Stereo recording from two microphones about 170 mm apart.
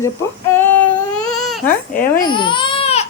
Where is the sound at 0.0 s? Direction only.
15° left (ahead or behind).